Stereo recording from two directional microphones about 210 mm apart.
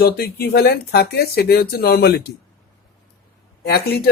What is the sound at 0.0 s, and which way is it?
Speech, 50° left (ahead or behind).